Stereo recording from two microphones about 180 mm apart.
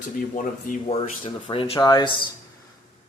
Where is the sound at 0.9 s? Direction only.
30° left (ahead or behind).